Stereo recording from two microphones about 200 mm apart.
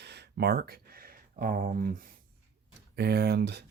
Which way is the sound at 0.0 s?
55° right (ahead or behind).